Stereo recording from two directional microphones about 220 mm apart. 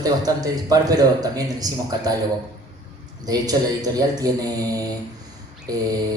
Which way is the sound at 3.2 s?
15° right (ahead or behind).